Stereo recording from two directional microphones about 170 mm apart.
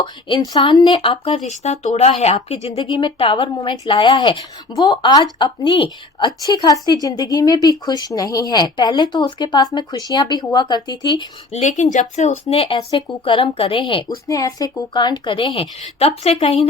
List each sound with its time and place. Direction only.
0.0 s a woman's voice: 25° left (ahead or behind)
11.5 s a woman's voice: 45° left (ahead or behind)